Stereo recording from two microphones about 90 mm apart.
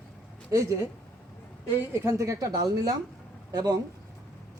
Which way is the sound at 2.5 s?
45° right (ahead or behind).